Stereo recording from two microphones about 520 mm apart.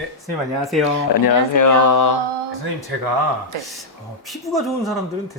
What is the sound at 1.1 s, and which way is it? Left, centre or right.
Speech, left.